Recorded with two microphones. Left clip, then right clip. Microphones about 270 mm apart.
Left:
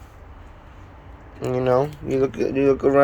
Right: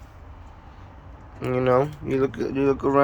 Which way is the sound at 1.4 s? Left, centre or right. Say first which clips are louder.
Left 1 dB; centre.